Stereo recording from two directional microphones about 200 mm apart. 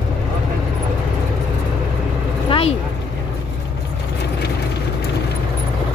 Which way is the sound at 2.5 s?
30° left (ahead or behind).